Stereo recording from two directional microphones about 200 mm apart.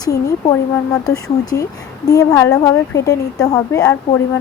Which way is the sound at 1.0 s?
15° left (ahead or behind).